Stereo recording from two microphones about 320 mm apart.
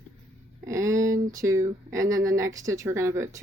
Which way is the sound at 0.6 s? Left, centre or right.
Centre.